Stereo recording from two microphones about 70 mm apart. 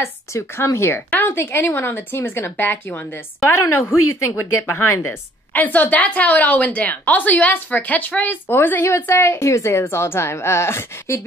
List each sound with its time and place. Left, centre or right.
0.3 s speech: left
5.5 s a woman's voice: left